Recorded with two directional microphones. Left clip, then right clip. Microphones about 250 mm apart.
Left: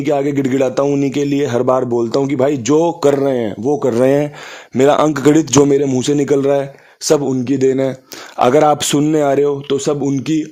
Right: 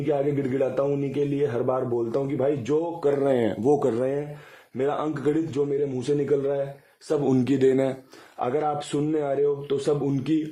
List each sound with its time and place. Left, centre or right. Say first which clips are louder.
0.0 s a man's voice: left 9 dB; left
7.3 s speech: left 6 dB; centre
8.4 s speech: left 14 dB; left